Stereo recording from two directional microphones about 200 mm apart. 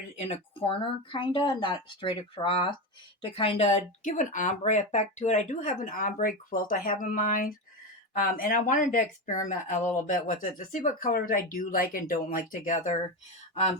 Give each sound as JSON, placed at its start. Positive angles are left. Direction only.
{"t": 0.2, "sound": "speech", "side_deg": 30}